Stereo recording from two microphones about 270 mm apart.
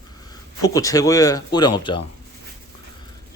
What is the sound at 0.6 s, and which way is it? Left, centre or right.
Speech, centre.